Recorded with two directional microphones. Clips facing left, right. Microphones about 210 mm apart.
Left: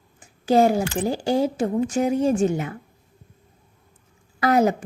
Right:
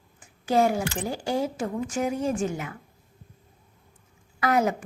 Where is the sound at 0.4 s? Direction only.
30° left (ahead or behind).